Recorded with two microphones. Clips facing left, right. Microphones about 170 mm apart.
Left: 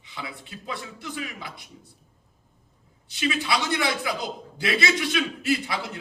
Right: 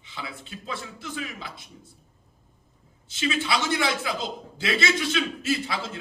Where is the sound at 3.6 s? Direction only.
25° right (ahead or behind).